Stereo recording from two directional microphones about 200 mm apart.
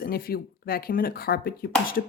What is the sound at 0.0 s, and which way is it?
Speech, 50° left (ahead or behind).